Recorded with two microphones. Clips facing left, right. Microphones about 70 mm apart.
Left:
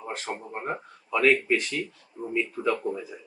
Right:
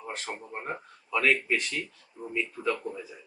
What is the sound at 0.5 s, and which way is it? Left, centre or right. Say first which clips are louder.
Speech: left 4 dB; centre.